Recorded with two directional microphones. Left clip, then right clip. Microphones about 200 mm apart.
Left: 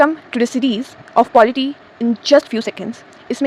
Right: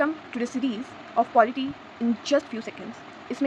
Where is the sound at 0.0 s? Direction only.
45° left (ahead or behind).